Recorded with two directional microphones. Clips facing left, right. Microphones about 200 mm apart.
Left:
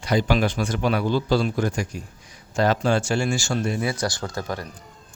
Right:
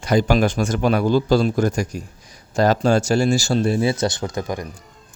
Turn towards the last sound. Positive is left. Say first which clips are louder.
# right 4 dB
turn(degrees=-15)  # may be behind; listen again after turning